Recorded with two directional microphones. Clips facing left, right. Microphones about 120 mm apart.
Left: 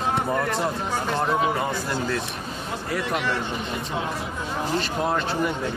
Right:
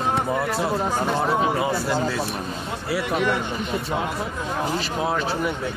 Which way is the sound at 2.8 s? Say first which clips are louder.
Right 4 dB; 5° right (ahead or behind).